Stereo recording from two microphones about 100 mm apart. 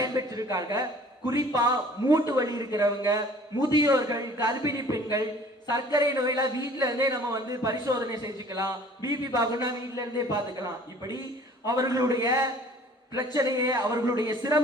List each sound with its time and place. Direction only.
0.0 s a sound: 40° right (ahead or behind)
1.3 s a man's voice: 35° right (ahead or behind)
11.6 s a man's voice: 35° right (ahead or behind)